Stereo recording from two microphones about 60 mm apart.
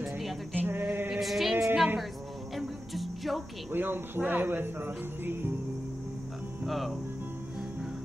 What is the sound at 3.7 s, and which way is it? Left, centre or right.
Speech, right.